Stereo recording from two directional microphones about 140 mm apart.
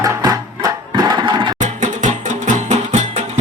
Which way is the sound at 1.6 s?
60° right (ahead or behind).